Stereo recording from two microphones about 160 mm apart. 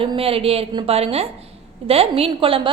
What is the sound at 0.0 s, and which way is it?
A woman's voice, 35° right (ahead or behind).